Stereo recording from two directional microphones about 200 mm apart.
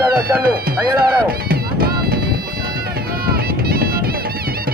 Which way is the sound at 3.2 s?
50° right (ahead or behind).